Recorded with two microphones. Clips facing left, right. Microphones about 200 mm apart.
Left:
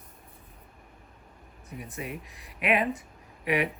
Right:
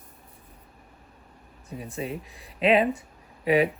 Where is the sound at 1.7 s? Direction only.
30° right (ahead or behind).